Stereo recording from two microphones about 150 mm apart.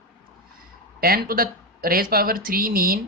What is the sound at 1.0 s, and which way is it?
Speech, 80° right.